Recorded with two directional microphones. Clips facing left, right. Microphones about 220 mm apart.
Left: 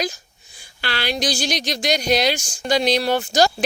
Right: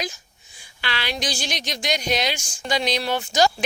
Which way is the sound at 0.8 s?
40° left (ahead or behind).